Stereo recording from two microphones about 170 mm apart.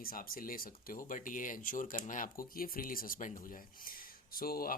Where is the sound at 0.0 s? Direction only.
60° left (ahead or behind).